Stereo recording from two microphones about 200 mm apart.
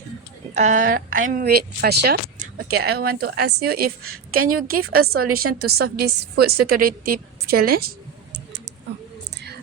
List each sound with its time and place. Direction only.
0.5 s a woman's voice: 35° right (ahead or behind)
4.0 s a woman's voice: 90° right
5.5 s a woman's voice: 50° right (ahead or behind)
9.3 s a sound: 55° right (ahead or behind)